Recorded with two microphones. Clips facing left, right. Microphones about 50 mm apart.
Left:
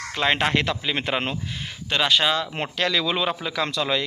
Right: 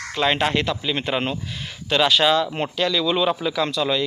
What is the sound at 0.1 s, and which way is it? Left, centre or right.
Speech, left.